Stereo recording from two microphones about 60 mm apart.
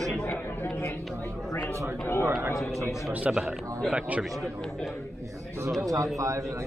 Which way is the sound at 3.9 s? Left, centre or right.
Right.